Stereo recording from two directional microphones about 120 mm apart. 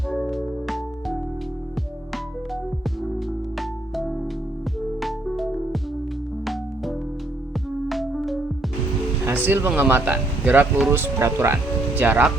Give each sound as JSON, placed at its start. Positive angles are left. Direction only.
{"t": 0.1, "sound": "music", "side_deg": 0}
{"t": 3.6, "sound": "music", "side_deg": 0}
{"t": 9.2, "sound": "speech", "side_deg": -20}